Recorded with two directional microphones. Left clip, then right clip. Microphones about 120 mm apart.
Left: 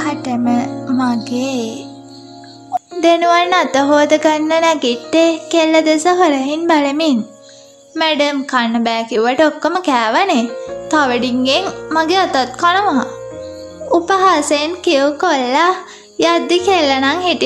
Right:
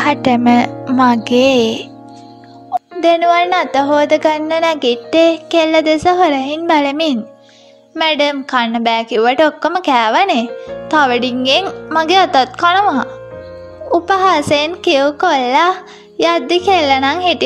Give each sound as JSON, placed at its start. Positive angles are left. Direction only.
{"t": 0.0, "sound": "speech", "side_deg": -70}
{"t": 3.0, "sound": "a child's voice", "side_deg": -30}